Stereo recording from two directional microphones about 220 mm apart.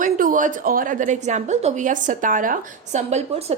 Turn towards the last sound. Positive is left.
turn(degrees=-30)  # may be behind; listen again after turning